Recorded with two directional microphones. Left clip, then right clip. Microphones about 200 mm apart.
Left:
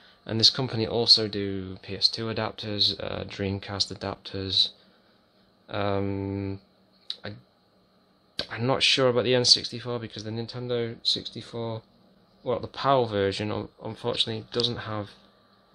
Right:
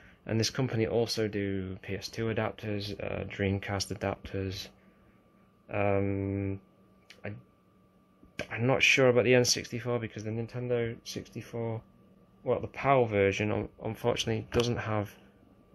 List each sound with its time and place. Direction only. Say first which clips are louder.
0.2 s speech: left 9 dB; 10° left (ahead or behind)
3.6 s speech: left 3 dB; 5° right (ahead or behind)
5.7 s speech: left 1 dB; 10° left (ahead or behind)
8.4 s speech: left 2 dB; 10° left (ahead or behind)
12.4 s speech: left 2 dB; 25° left (ahead or behind)
13.1 s speech: even; 10° left (ahead or behind)